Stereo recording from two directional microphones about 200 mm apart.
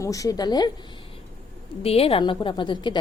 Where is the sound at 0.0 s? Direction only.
15° left (ahead or behind).